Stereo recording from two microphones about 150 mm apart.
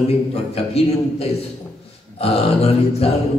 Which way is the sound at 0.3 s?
40° left (ahead or behind).